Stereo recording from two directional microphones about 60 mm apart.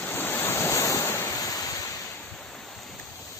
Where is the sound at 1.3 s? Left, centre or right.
Left.